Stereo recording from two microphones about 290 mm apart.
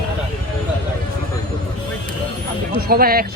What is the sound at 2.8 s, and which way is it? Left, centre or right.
Speech, right.